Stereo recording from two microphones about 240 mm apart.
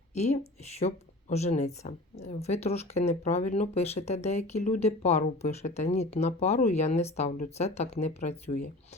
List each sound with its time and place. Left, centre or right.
0.1 s a woman's voice: left